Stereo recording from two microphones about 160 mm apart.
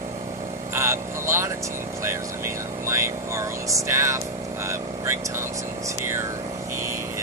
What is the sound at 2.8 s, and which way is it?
Vehicle, 15° right (ahead or behind).